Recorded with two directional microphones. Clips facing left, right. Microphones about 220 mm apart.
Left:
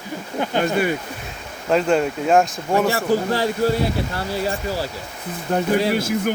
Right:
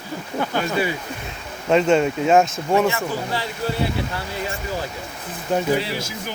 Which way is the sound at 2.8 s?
40° left (ahead or behind).